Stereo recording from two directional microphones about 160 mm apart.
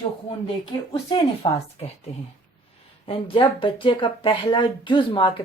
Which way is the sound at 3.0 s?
35° left (ahead or behind).